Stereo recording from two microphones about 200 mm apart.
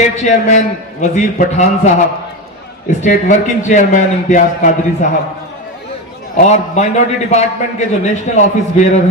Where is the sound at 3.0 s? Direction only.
35° left (ahead or behind).